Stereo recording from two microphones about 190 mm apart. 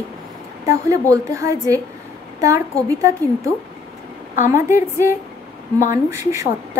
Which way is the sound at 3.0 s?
15° right (ahead or behind).